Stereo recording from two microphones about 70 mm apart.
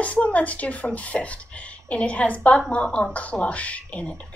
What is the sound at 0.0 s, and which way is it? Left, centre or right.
A child's voice, centre.